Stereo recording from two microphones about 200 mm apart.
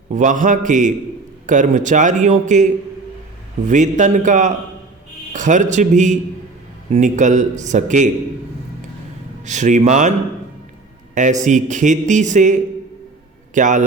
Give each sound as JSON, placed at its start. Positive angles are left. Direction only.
{"t": 0.1, "sound": "a man's voice", "side_deg": -40}
{"t": 3.7, "sound": "a man's voice", "side_deg": -40}
{"t": 9.4, "sound": "a man's voice", "side_deg": -35}